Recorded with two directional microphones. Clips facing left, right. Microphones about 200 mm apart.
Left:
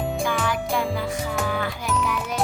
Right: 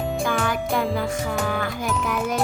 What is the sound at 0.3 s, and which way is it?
Music, 50° right (ahead or behind).